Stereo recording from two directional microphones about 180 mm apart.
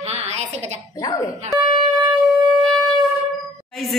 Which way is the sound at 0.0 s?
35° right (ahead or behind).